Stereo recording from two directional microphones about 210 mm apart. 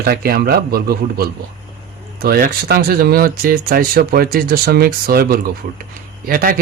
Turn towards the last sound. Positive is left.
turn(degrees=-40)  # may be behind; listen again after turning